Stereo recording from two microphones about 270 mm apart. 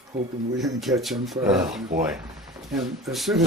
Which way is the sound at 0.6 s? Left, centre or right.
Centre.